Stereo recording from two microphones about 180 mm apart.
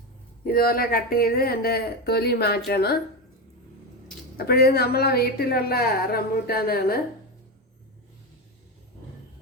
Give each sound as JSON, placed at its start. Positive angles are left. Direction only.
{"t": 0.4, "sound": "a woman's voice", "side_deg": 55}
{"t": 4.4, "sound": "a woman's voice", "side_deg": 60}